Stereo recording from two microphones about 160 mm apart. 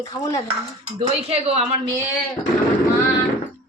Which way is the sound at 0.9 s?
40° right (ahead or behind).